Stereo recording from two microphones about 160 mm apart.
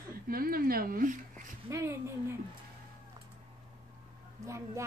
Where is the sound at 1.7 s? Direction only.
15° right (ahead or behind).